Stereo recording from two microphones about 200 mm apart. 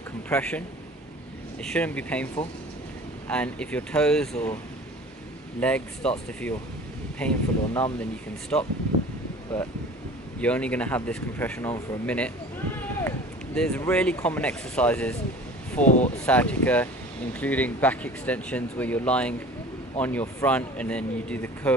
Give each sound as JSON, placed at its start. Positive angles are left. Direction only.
{"t": 0.3, "sound": "speech", "side_deg": 5}
{"t": 3.3, "sound": "speech", "side_deg": 5}
{"t": 5.6, "sound": "speech", "side_deg": 5}
{"t": 13.6, "sound": "speech", "side_deg": 5}
{"t": 15.8, "sound": "speech", "side_deg": 40}
{"t": 16.3, "sound": "speech", "side_deg": 5}